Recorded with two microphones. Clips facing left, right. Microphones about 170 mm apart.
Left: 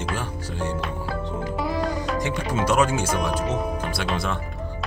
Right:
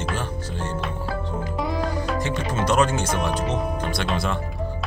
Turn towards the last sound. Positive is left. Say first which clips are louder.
# right 1 dB
turn(degrees=0)  # may be behind; listen again after turning